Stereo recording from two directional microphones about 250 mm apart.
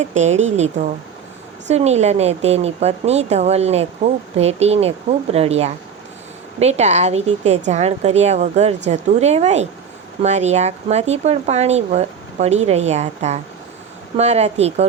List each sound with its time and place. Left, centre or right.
0.0 s a woman's voice: right